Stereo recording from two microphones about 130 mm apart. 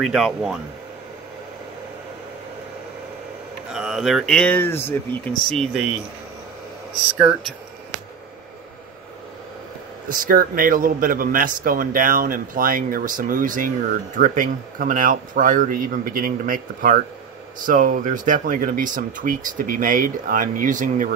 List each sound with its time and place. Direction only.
0.0 s speech: centre (ahead or behind)
3.7 s speech: 5° right (ahead or behind); by 5.3 s 15° left (ahead or behind)
10.0 s a man's voice: 90° right